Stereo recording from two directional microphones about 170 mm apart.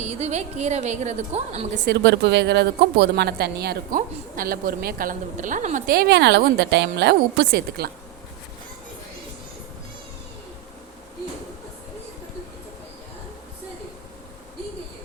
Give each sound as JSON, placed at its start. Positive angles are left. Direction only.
{"t": 0.0, "sound": "a woman's voice", "side_deg": -40}
{"t": 1.9, "sound": "speech", "side_deg": -85}
{"t": 4.4, "sound": "a woman's voice", "side_deg": -55}